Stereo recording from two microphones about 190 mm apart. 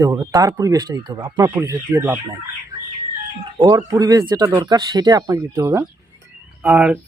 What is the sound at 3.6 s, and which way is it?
Speech, 20° right (ahead or behind).